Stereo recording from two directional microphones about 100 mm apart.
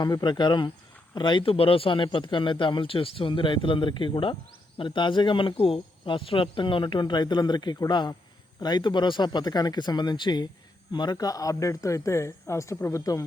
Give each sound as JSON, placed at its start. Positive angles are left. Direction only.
{"t": 0.0, "sound": "speech", "side_deg": 45}